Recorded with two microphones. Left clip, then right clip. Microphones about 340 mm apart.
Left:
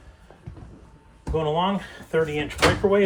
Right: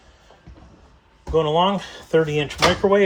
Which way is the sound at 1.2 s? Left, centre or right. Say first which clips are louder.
Right 5 dB; right.